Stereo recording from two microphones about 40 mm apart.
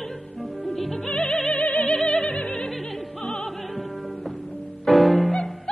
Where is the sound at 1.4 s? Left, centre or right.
Left.